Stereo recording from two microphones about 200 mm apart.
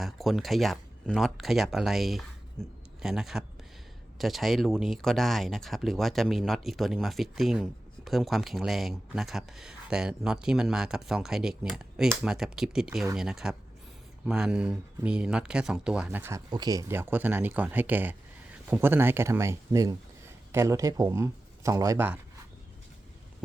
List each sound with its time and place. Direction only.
0.0 s speech: centre (ahead or behind)